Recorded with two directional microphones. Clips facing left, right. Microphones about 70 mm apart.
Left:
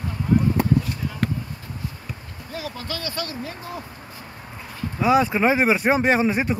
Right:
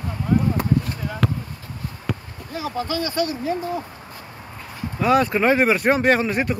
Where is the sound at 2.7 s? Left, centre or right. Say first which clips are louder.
Right 10 dB; centre.